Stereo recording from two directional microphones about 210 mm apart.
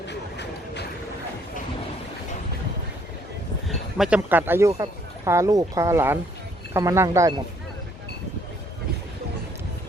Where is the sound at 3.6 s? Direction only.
Centre (ahead or behind).